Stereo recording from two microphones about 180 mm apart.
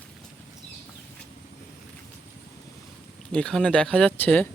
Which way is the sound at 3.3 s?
5° left (ahead or behind).